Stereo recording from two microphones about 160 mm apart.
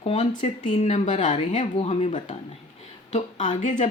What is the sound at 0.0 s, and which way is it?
A woman's voice, 40° left (ahead or behind).